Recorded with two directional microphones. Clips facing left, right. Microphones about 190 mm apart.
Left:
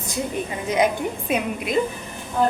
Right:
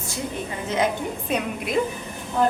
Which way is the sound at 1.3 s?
5° left (ahead or behind).